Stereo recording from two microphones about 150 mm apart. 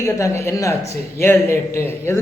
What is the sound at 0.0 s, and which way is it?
A man's voice, 20° left (ahead or behind).